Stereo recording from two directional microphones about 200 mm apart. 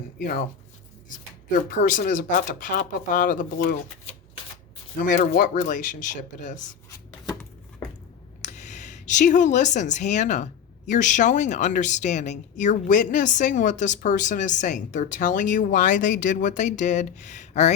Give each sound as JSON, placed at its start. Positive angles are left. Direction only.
{"t": 0.2, "sound": "speech", "side_deg": 45}
{"t": 1.7, "sound": "a woman's voice", "side_deg": 40}
{"t": 5.0, "sound": "a woman's voice", "side_deg": 40}
{"t": 8.4, "sound": "a woman's voice", "side_deg": 35}